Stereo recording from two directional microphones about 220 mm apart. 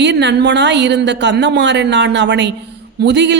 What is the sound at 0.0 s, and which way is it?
A man's voice, 50° right (ahead or behind).